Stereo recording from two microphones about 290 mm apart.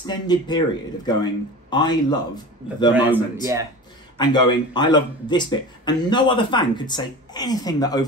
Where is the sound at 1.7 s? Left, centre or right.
Centre.